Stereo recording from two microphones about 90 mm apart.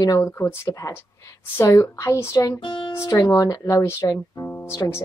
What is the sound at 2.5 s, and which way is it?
Music, 65° left (ahead or behind).